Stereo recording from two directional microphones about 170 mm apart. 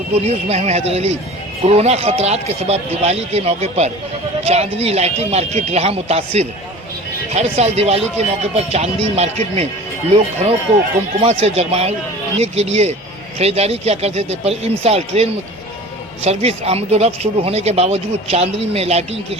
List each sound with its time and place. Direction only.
0.1 s speech: 40° right (ahead or behind)